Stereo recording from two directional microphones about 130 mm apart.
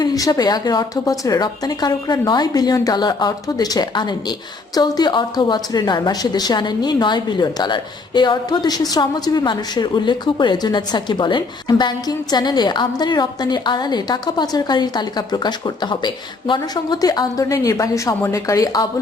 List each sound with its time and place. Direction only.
0.0 s a woman's voice: 30° left (ahead or behind)